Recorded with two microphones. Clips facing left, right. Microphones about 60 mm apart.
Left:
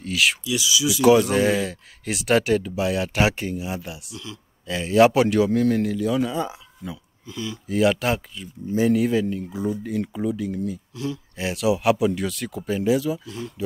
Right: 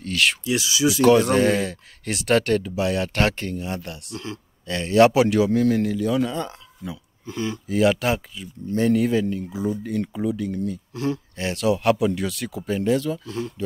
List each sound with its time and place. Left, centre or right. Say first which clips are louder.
0.0 s speech: even; centre
0.4 s speech: right 2 dB; right
1.0 s speech: even; centre
4.1 s speech: right 5 dB; right
4.6 s speech: even; centre
7.2 s speech: right 4 dB; right
7.6 s speech: even; centre
10.9 s speech: right 4 dB; right
11.3 s speech: left 2 dB; centre